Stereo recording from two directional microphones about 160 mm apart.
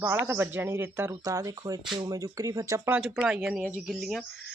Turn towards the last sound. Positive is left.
turn(degrees=0)  # may be behind; listen again after turning